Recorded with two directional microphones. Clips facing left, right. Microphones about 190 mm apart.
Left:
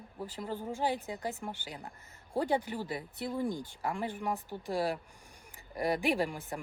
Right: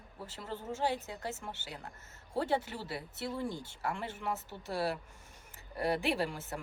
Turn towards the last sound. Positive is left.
turn(degrees=15)  # may be behind; listen again after turning